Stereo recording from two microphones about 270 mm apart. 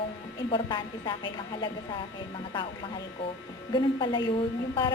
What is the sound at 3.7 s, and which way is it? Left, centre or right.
Speech, centre.